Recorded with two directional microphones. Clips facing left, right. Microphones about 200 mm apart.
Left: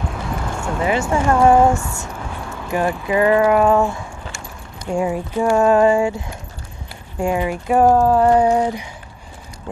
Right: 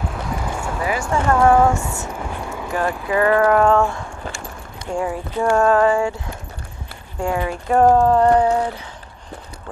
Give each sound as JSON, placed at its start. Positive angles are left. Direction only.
{"t": 0.0, "sound": "clip-clop", "side_deg": -5}
{"t": 0.7, "sound": "speech", "side_deg": 25}
{"t": 1.0, "sound": "speech", "side_deg": 15}
{"t": 2.7, "sound": "speech", "side_deg": 15}
{"t": 4.9, "sound": "speech", "side_deg": 20}
{"t": 7.2, "sound": "speech", "side_deg": 15}